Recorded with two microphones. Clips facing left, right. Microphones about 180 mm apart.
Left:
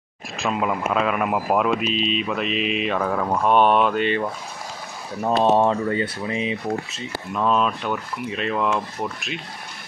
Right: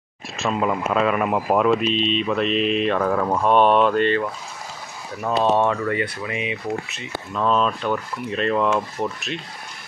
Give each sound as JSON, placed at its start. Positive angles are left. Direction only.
{"t": 0.4, "sound": "speech", "side_deg": 0}
{"t": 5.2, "sound": "speech", "side_deg": 25}
{"t": 7.3, "sound": "speech", "side_deg": 5}